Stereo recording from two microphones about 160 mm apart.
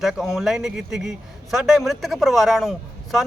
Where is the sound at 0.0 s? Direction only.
Centre (ahead or behind).